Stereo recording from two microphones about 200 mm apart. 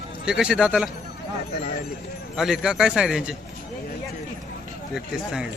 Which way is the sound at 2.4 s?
Centre (ahead or behind).